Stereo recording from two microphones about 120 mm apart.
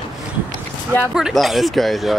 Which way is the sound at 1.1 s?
5° right (ahead or behind).